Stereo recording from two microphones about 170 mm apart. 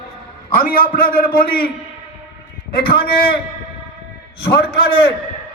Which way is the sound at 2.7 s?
65° left (ahead or behind).